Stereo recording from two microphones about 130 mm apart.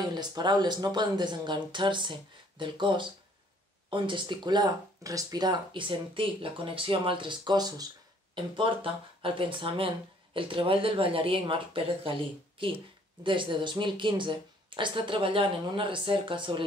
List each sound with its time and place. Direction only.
0.1 s speech: 30° right (ahead or behind)
8.5 s speech: 40° right (ahead or behind)
13.2 s speech: 40° right (ahead or behind)